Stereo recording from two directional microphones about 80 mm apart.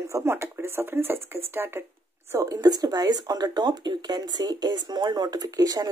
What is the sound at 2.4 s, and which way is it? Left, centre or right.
Speech, right.